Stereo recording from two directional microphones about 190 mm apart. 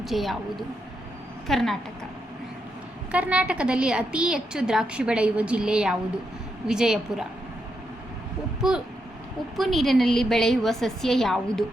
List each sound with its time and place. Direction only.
0.0 s a woman's voice: centre (ahead or behind)
3.1 s a woman's voice: 5° right (ahead or behind)
9.6 s a woman's voice: centre (ahead or behind)